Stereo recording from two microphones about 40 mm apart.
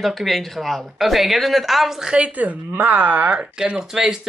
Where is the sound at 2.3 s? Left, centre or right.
Right.